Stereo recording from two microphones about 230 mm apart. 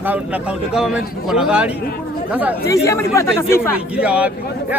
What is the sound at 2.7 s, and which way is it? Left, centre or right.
Speech, centre.